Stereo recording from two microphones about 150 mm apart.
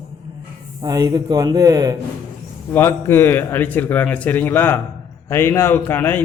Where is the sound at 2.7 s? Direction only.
15° left (ahead or behind).